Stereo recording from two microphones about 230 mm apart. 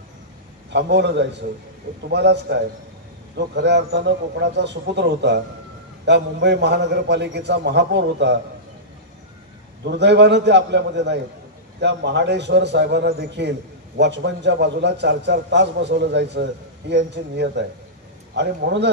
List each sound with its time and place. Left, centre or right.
0.7 s a man's voice: right
9.8 s a man's voice: right